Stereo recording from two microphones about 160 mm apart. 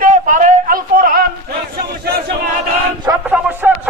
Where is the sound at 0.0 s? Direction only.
55° right (ahead or behind).